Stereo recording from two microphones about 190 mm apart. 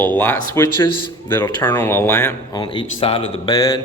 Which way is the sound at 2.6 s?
25° left (ahead or behind).